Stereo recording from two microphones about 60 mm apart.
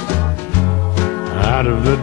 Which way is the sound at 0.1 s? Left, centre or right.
Left.